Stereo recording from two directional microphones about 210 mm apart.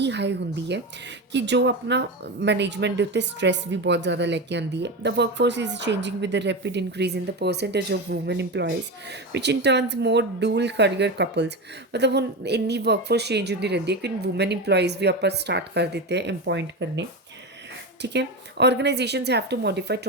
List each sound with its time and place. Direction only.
0.0 s speech: 55° right (ahead or behind)